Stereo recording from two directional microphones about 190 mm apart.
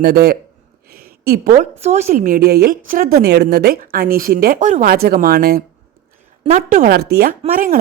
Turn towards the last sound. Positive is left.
turn(degrees=-45)  # may be behind; listen again after turning